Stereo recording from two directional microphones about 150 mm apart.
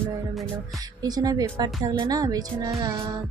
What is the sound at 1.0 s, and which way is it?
Speech, 25° right (ahead or behind).